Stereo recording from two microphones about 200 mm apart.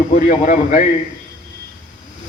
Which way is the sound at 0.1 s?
40° left (ahead or behind).